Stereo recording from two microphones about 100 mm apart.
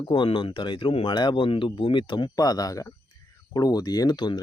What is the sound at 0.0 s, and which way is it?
Speech, 55° left (ahead or behind).